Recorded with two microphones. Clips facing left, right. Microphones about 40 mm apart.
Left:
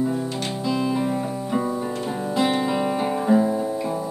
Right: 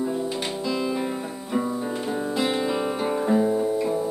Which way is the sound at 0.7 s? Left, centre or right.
Centre.